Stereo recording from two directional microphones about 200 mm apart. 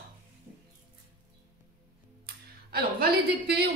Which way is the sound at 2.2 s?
50° right (ahead or behind).